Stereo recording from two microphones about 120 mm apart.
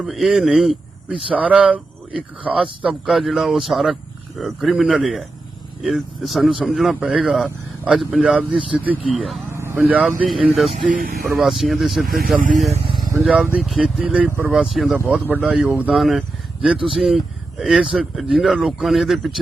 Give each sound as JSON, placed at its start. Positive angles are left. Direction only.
{"t": 0.0, "sound": "speech", "side_deg": 0}
{"t": 9.1, "sound": "speech", "side_deg": 0}
{"t": 9.5, "sound": "vehicle", "side_deg": -20}
{"t": 9.8, "sound": "speech", "side_deg": -10}
{"t": 13.0, "sound": "vehicle", "side_deg": -30}
{"t": 13.2, "sound": "speech", "side_deg": -15}
{"t": 13.6, "sound": "speech", "side_deg": 0}
{"t": 14.3, "sound": "speech", "side_deg": -20}
{"t": 14.5, "sound": "speech", "side_deg": 0}
{"t": 14.9, "sound": "speech", "side_deg": -20}